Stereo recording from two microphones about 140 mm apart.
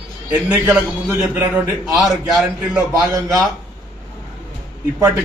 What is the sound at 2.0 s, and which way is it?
Speech, centre (ahead or behind).